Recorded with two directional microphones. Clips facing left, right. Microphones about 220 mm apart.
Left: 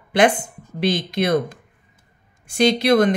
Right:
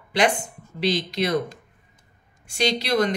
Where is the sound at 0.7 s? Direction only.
50° left (ahead or behind).